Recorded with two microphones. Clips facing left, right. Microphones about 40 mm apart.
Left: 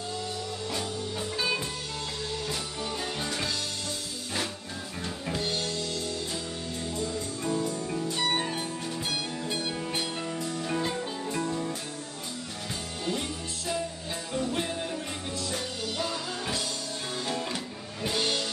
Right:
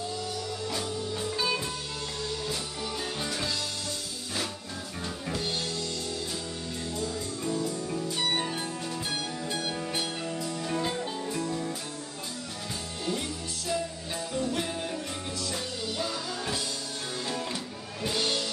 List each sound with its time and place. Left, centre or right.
3.2 s music: centre
7.0 s music: centre
8.4 s music: centre
14.3 s music: centre
18.2 s music: centre